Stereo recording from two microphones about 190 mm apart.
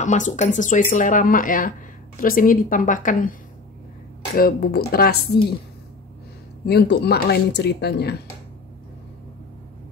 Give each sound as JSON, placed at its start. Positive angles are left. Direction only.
{"t": 0.0, "sound": "speech", "side_deg": 40}
{"t": 4.4, "sound": "speech", "side_deg": 50}
{"t": 6.6, "sound": "speech", "side_deg": 60}